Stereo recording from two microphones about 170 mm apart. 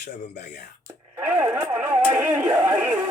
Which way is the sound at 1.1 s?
10° right (ahead or behind).